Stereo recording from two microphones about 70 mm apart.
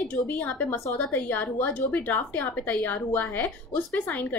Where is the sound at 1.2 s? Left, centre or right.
Left.